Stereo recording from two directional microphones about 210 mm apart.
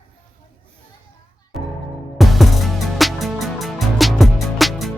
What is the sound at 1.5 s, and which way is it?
Music, centre (ahead or behind).